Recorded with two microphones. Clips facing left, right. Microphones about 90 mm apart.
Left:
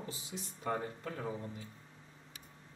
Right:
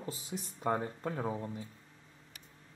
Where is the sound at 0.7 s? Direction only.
30° right (ahead or behind).